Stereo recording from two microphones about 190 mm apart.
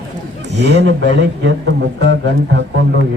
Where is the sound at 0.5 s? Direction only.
65° right (ahead or behind).